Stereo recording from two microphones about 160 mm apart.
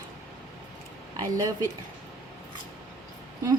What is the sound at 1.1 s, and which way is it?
Speech, 20° right (ahead or behind).